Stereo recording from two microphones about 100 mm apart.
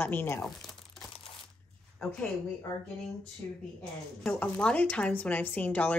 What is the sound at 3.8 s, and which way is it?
Speech, 15° left (ahead or behind).